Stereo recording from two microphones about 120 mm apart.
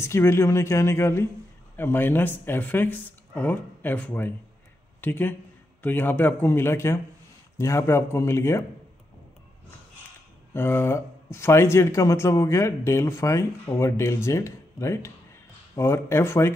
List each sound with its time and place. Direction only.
0.0 s speech: 20° left (ahead or behind)
10.5 s speech: 20° left (ahead or behind)